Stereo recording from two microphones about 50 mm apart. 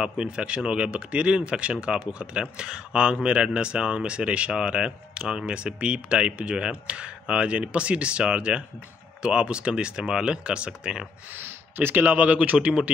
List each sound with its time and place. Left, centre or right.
0.0 s speech: centre
11.3 s speech: right